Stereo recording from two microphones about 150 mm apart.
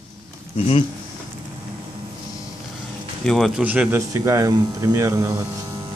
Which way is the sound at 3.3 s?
Centre (ahead or behind).